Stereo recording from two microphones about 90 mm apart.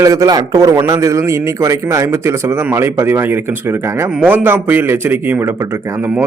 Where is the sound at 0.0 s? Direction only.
40° right (ahead or behind).